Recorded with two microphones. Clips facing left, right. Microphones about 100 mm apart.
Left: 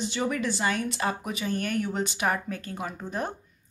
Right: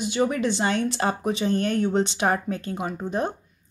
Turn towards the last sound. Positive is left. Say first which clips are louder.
# right 5 dB
turn(degrees=-20)  # may be behind; listen again after turning